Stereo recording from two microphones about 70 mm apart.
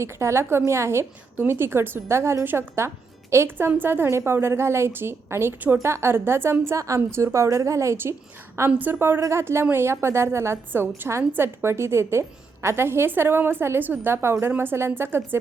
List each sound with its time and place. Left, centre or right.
0.0 s a woman's voice: right
8.8 s a woman's voice: right